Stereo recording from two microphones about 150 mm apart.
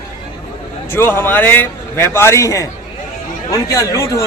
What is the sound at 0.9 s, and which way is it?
A man's voice, 15° left (ahead or behind).